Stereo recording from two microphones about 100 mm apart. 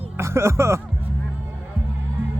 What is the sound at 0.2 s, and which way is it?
Speech, 25° right (ahead or behind).